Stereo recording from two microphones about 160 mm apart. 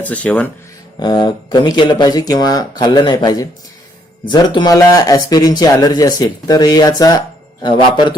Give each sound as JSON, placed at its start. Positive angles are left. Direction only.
{"t": 0.0, "sound": "speech", "side_deg": 10}
{"t": 0.9, "sound": "speech", "side_deg": 25}